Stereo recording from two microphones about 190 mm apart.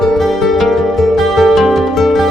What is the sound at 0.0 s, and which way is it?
Music, centre (ahead or behind).